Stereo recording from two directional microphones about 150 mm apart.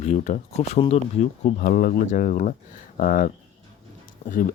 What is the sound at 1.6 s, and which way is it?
Speech, 80° left.